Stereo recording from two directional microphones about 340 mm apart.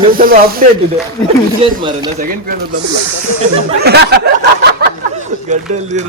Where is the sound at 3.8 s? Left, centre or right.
Right.